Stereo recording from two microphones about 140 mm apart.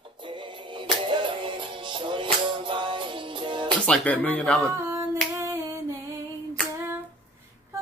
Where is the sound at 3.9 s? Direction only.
10° left (ahead or behind).